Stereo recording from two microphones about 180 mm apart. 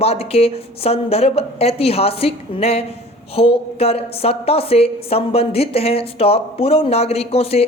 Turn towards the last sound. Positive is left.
turn(degrees=35)  # may be behind; listen again after turning